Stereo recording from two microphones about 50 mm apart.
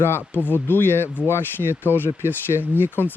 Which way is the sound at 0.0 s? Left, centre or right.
Left.